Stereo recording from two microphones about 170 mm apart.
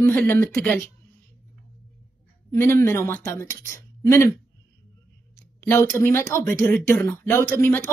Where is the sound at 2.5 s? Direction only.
15° left (ahead or behind).